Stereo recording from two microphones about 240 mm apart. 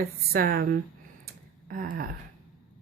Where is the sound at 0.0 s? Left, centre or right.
Right.